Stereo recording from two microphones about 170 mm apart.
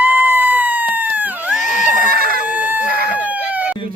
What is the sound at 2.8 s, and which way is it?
Chicken, 65° right (ahead or behind).